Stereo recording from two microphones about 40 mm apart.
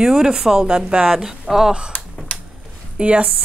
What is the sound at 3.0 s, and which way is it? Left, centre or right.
Speech, right.